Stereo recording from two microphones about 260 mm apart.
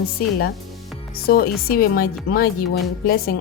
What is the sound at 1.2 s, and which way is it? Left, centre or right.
Speech, left.